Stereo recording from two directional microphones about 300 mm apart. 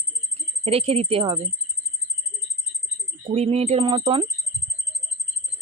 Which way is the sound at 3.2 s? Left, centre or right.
Centre.